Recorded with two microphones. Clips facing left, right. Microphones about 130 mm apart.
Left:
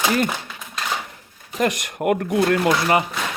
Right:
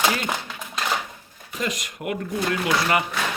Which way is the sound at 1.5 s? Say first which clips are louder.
Left 7 dB; 60° left (ahead or behind).